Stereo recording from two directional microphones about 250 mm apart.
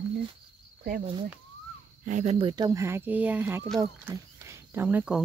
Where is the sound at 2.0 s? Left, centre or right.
Right.